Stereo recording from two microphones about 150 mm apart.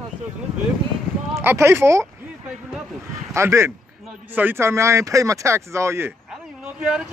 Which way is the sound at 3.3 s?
15° right (ahead or behind).